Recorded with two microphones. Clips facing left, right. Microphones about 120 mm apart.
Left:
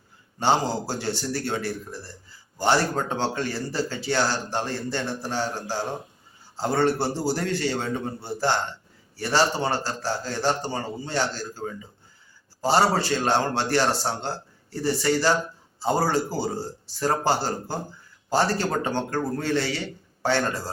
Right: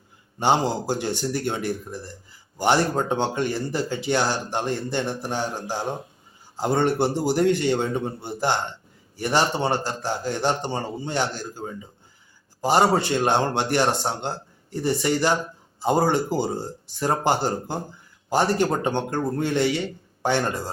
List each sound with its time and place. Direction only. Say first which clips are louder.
0.3 s speech: right 1 dB; 15° right (ahead or behind)